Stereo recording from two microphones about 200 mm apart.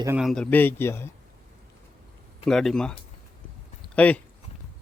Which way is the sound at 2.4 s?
Centre (ahead or behind).